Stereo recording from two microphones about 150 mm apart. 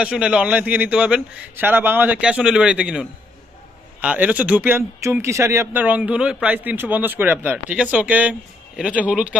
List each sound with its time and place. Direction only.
0.0 s speech: 5° right (ahead or behind)